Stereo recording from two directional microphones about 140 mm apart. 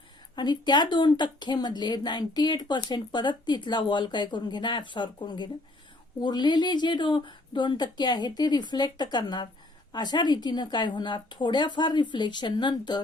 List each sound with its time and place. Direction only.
0.3 s speech: 30° left (ahead or behind)